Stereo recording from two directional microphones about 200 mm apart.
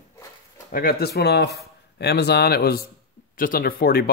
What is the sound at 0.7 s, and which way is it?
Speech, 50° left (ahead or behind).